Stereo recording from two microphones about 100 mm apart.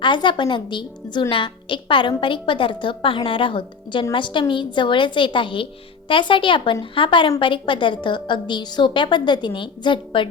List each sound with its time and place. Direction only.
0.0 s a woman's voice: 55° left (ahead or behind)